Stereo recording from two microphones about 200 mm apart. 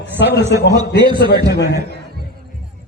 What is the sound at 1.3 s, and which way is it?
Speech, 55° left (ahead or behind).